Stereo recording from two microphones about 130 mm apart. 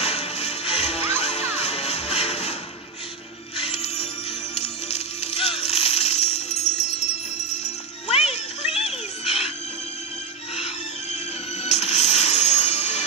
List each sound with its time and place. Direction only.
0.0 s smash: 55° left (ahead or behind)
1.2 s music: 55° left (ahead or behind)
3.5 s music: 55° left (ahead or behind)
10.5 s music: 55° left (ahead or behind)